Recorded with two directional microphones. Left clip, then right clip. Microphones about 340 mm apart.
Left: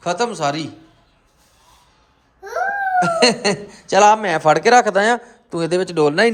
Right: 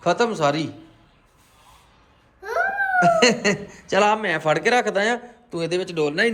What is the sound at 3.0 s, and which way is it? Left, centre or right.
A man's voice, centre.